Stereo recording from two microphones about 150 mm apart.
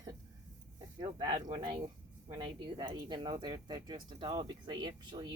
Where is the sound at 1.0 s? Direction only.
25° right (ahead or behind).